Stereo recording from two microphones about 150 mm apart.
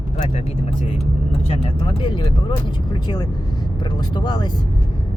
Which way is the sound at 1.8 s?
30° left (ahead or behind).